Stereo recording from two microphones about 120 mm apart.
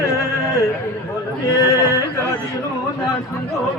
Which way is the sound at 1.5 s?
30° left (ahead or behind).